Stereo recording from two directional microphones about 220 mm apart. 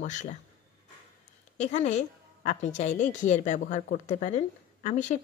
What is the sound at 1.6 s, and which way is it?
A woman's voice, 30° left (ahead or behind).